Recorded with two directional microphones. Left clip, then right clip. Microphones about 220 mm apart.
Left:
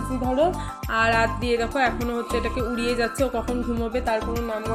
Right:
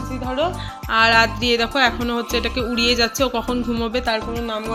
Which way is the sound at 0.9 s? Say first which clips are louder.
Right 6 dB; 20° right (ahead or behind).